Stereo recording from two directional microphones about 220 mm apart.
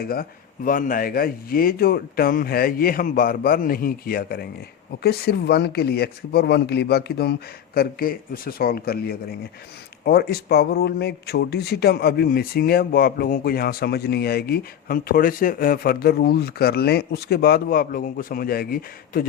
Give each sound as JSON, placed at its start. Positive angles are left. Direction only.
{"t": 0.0, "sound": "speech", "side_deg": 40}